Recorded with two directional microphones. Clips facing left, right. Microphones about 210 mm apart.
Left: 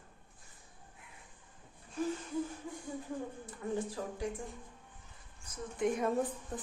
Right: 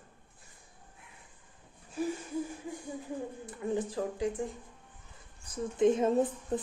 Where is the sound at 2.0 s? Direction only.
10° right (ahead or behind).